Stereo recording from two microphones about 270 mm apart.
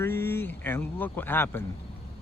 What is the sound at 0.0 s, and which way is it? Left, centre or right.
Speech, centre.